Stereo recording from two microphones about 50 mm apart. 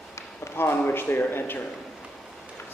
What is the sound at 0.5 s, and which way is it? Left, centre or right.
Speech, left.